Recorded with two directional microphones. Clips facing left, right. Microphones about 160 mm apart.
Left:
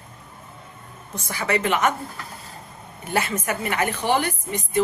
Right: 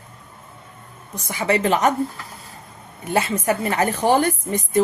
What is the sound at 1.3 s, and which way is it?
Speech, 25° right (ahead or behind).